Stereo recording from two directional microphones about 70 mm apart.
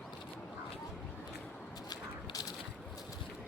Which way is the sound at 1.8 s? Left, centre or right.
Left.